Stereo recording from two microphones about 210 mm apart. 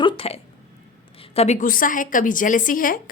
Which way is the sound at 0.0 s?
25° left (ahead or behind).